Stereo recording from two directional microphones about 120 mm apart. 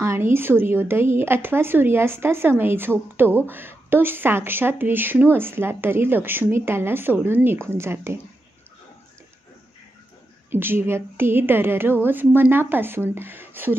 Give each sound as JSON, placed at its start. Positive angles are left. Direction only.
{"t": 0.0, "sound": "speech", "side_deg": -20}
{"t": 10.5, "sound": "speech", "side_deg": -20}